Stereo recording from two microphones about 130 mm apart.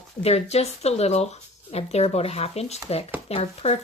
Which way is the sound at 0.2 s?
55° left (ahead or behind).